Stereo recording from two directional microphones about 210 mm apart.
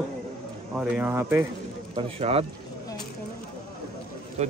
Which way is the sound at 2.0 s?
30° right (ahead or behind).